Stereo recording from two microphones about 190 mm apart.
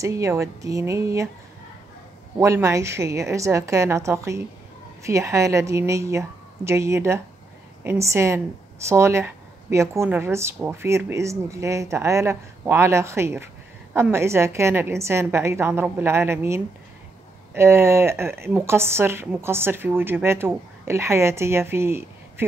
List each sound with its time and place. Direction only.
0.0 s speech: 15° right (ahead or behind)
2.3 s speech: 15° right (ahead or behind)